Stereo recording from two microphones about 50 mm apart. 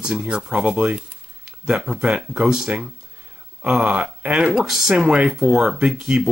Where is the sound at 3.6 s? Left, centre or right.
Centre.